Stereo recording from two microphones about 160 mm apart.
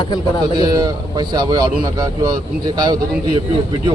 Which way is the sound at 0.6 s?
25° right (ahead or behind).